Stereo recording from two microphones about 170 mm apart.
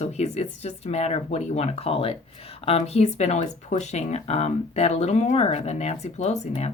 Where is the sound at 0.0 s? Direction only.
40° left (ahead or behind).